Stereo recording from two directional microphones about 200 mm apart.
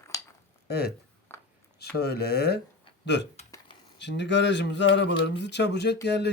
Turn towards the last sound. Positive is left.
turn(degrees=60)  # may be behind; listen again after turning